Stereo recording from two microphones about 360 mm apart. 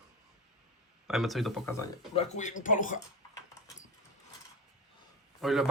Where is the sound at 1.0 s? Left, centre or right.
Centre.